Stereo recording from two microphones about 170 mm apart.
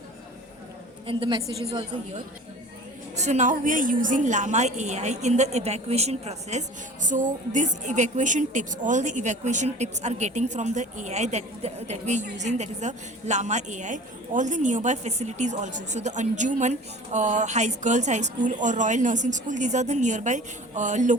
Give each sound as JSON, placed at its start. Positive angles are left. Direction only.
{"t": 1.0, "sound": "a woman's voice", "side_deg": -30}
{"t": 3.2, "sound": "a woman's voice", "side_deg": -45}